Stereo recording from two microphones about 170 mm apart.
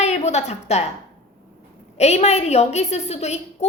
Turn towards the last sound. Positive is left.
turn(degrees=40)  # may be behind; listen again after turning